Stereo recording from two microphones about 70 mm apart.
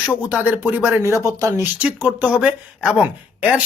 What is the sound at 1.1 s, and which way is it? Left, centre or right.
Speech, right.